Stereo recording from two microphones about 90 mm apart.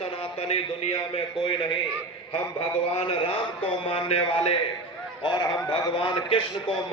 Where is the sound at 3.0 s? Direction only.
90° left.